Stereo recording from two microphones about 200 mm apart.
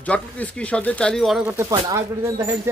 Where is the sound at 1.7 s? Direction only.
15° right (ahead or behind).